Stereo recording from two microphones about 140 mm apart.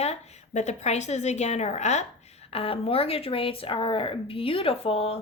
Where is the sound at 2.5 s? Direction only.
40° left (ahead or behind).